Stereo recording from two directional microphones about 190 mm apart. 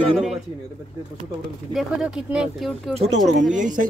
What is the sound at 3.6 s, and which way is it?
Speech, 45° right (ahead or behind).